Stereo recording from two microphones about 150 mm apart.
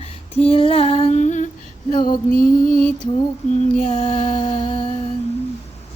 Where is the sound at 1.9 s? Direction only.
65° left (ahead or behind).